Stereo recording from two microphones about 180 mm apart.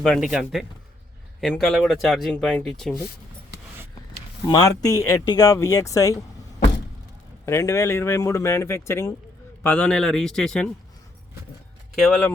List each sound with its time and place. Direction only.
0.0 s speech: centre (ahead or behind)
4.4 s speech: 20° left (ahead or behind)
7.4 s a man's voice: 15° left (ahead or behind)
11.9 s speech: centre (ahead or behind)